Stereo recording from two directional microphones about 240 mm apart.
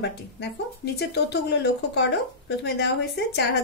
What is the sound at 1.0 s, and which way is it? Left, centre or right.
A woman's voice, left.